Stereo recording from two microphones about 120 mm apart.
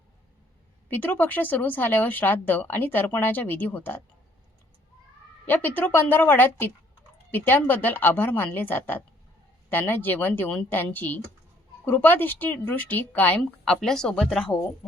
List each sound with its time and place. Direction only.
0.9 s speech: 15° left (ahead or behind)
5.5 s speech: 15° left (ahead or behind)